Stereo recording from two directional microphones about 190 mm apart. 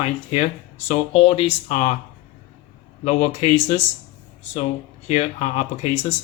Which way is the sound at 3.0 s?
35° left (ahead or behind).